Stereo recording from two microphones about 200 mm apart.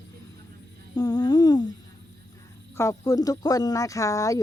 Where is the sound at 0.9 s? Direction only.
20° left (ahead or behind).